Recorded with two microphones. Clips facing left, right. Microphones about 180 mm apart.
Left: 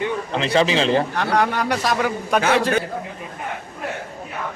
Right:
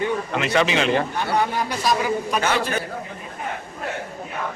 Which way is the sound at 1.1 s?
80° left.